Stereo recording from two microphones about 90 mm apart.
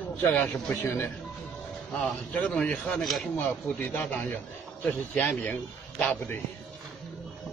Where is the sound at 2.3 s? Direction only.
15° left (ahead or behind).